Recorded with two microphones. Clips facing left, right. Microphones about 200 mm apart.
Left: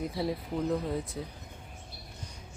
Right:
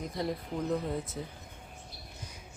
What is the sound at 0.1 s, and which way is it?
Speech, 5° left (ahead or behind).